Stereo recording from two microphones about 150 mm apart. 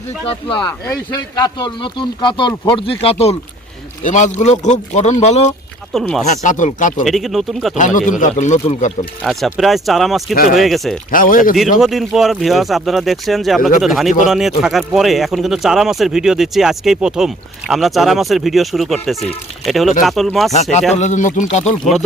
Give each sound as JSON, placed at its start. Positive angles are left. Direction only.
{"t": 0.3, "sound": "speech", "side_deg": 35}
{"t": 4.0, "sound": "speech", "side_deg": 55}
{"t": 5.9, "sound": "speech", "side_deg": 0}
{"t": 6.2, "sound": "speech", "side_deg": 55}
{"t": 7.0, "sound": "speech", "side_deg": 0}
{"t": 7.8, "sound": "speech", "side_deg": 60}
{"t": 9.2, "sound": "speech", "side_deg": 0}
{"t": 11.1, "sound": "speech", "side_deg": 65}
{"t": 11.8, "sound": "speech", "side_deg": 0}
{"t": 13.6, "sound": "speech", "side_deg": 65}
{"t": 13.8, "sound": "speech", "side_deg": 0}
{"t": 20.5, "sound": "speech", "side_deg": 50}